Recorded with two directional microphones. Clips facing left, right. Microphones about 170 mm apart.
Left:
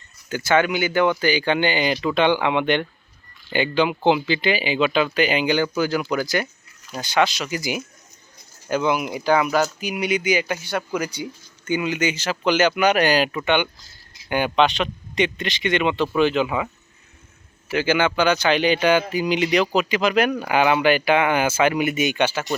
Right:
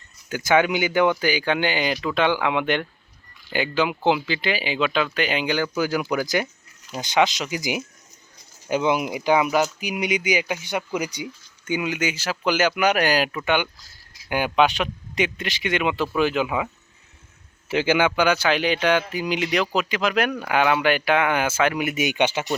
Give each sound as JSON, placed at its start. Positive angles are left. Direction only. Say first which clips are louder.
{"t": 0.3, "sound": "speech", "louder": "even", "side_deg": -10}
{"t": 17.7, "sound": "speech", "louder": "even", "side_deg": -20}